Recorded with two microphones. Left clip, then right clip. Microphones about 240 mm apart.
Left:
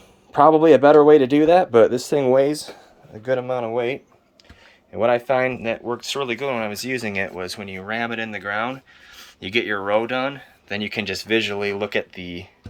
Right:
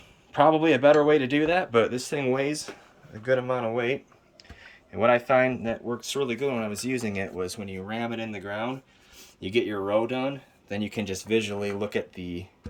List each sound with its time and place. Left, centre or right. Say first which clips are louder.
0.3 s speech: left 8 dB; left
4.9 s speech: left 2 dB; centre
6.1 s speech: left 2 dB; centre